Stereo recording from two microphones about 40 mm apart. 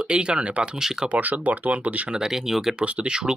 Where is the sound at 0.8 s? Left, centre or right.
Centre.